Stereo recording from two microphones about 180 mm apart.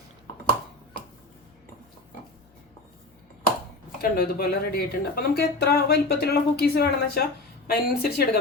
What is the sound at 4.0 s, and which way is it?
Speech, 55° left (ahead or behind).